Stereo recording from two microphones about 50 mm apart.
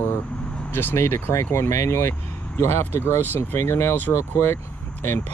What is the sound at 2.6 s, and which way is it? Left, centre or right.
Speech, left.